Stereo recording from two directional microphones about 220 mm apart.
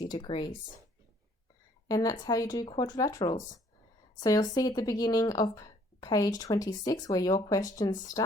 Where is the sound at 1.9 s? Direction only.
15° left (ahead or behind).